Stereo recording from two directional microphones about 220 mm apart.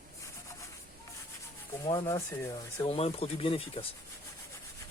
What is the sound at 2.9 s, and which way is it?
Speech, 25° left (ahead or behind).